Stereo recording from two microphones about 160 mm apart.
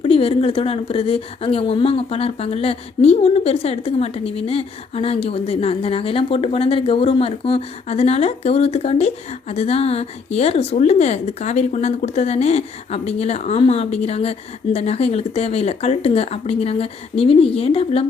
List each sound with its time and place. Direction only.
0.0 s a woman's voice: 35° left (ahead or behind)